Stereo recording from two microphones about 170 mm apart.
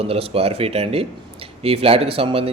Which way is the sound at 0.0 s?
35° right (ahead or behind).